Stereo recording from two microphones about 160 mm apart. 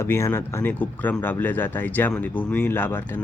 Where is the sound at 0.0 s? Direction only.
15° left (ahead or behind).